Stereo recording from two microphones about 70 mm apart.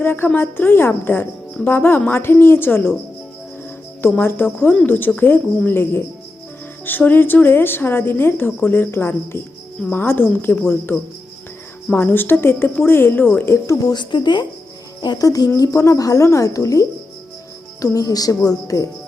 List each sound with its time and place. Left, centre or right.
0.0 s a woman's voice: left
4.2 s a woman's voice: left
11.9 s a woman's voice: left
13.8 s speech: left
15.0 s speech: left